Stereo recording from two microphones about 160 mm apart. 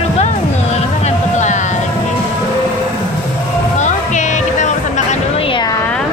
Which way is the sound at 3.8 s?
50° left (ahead or behind).